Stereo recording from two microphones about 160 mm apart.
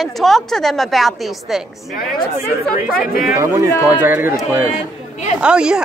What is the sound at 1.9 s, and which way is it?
Speech, 65° left (ahead or behind).